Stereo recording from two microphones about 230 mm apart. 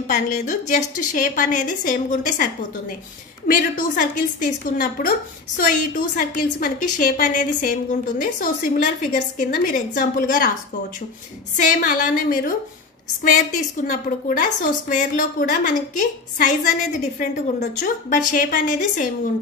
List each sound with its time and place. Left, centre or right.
0.0 s a woman's voice: left
11.5 s a woman's voice: left
13.8 s a woman's voice: left